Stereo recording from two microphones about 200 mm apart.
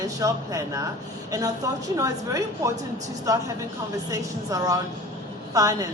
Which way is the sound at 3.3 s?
15° right (ahead or behind).